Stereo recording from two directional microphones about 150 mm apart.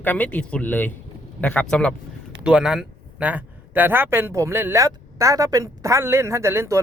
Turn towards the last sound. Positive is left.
turn(degrees=-20)  # may be behind; listen again after turning